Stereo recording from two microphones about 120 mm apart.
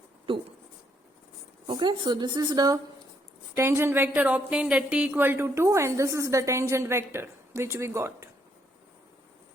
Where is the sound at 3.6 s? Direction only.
20° right (ahead or behind).